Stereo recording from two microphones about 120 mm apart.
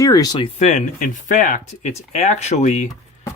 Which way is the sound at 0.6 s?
65° left (ahead or behind).